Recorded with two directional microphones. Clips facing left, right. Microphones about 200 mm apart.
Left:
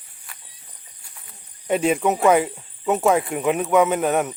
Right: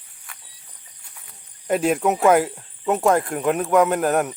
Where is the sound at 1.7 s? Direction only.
Centre (ahead or behind).